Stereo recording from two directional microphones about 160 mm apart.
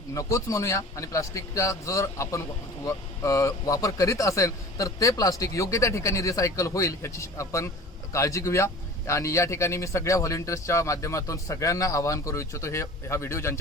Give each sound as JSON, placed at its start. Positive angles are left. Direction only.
{"t": 0.1, "sound": "a man's voice", "side_deg": 20}